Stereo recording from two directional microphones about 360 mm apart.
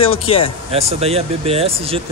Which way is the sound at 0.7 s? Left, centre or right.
Centre.